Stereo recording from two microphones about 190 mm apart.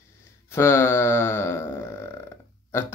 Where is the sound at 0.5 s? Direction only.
15° left (ahead or behind).